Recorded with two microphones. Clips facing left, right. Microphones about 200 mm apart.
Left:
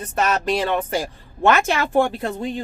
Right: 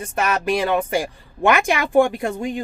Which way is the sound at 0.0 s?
10° right (ahead or behind).